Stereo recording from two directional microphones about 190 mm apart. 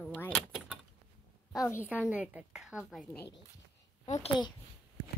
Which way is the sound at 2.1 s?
5° right (ahead or behind).